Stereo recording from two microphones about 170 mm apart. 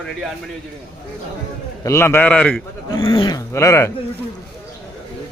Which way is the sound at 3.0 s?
30° left (ahead or behind).